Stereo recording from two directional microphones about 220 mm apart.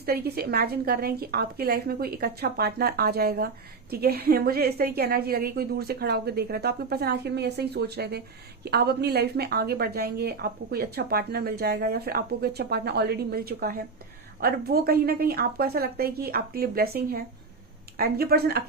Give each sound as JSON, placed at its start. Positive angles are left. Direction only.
{"t": 0.0, "sound": "a woman's voice", "side_deg": -45}